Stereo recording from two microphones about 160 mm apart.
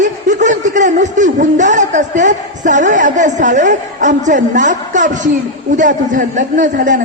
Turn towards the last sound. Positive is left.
turn(degrees=-55)  # may be behind; listen again after turning